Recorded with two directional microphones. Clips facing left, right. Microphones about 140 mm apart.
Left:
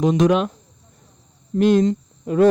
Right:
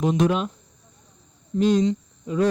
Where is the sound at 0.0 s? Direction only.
90° left.